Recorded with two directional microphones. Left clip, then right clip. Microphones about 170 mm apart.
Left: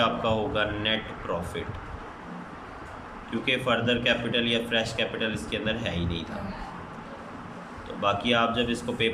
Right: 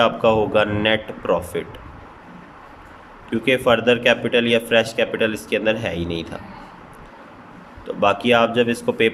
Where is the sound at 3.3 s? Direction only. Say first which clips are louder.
Right 9 dB; 45° right (ahead or behind).